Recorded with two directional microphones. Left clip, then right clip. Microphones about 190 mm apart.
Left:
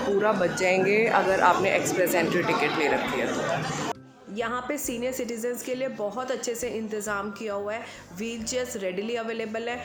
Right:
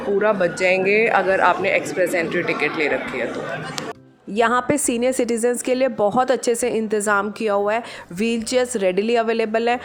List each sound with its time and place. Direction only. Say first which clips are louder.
0.2 s a man's voice: right 7 dB; 15° right (ahead or behind)
4.4 s a woman's voice: right 11 dB; 50° right (ahead or behind)